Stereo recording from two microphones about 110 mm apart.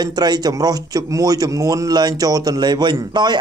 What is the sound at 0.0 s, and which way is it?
A man's voice, 40° right (ahead or behind).